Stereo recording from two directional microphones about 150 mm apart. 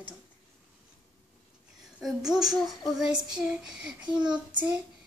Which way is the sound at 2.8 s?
5° right (ahead or behind).